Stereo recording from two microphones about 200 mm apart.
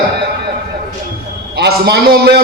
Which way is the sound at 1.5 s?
55° right (ahead or behind).